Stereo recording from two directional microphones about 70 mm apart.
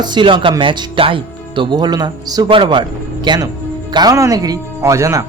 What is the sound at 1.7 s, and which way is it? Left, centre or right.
A man's voice, right.